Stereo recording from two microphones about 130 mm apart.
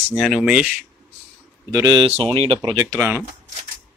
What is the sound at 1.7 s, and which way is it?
Speech, 30° right (ahead or behind).